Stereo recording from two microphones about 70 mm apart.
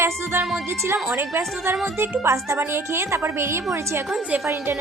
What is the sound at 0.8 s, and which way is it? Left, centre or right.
A woman's voice, right.